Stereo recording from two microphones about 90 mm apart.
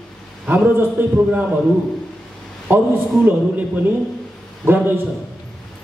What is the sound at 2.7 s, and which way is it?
Speech, 20° right (ahead or behind).